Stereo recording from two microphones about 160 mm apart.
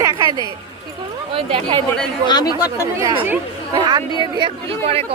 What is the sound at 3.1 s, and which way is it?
Speech, 10° right (ahead or behind).